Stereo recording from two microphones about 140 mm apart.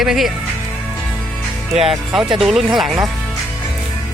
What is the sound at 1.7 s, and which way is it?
Speech, 5° right (ahead or behind).